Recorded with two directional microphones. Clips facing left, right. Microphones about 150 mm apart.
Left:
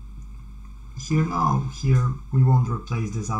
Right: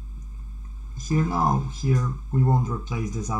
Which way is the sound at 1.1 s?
25° right (ahead or behind).